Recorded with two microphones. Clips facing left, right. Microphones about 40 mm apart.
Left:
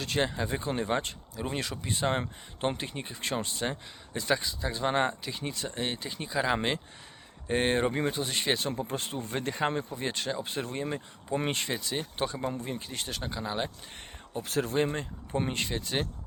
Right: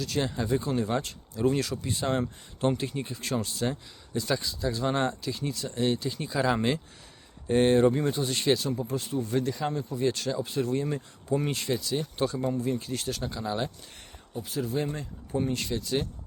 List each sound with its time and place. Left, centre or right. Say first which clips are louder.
0.0 s speech: even; left
6.2 s speech: right 2 dB; centre
8.9 s speech: right 4 dB; left
9.9 s speech: right 4 dB; left
10.4 s speech: right 5 dB; left
11.3 s speech: right 1 dB; left; by 13.7 s centre
14.4 s speech: left 2 dB; left